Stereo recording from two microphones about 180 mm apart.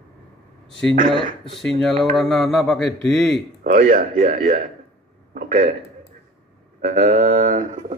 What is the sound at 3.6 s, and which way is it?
Speech, 50° right (ahead or behind).